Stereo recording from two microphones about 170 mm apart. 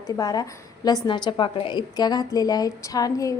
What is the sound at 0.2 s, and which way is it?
A woman's voice, 20° left (ahead or behind).